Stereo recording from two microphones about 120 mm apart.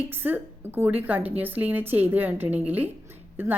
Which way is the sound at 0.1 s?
15° right (ahead or behind).